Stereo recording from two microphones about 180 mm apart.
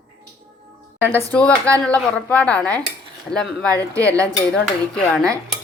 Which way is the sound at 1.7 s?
5° left (ahead or behind).